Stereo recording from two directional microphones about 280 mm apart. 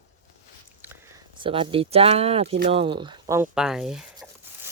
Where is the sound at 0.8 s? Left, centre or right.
Centre.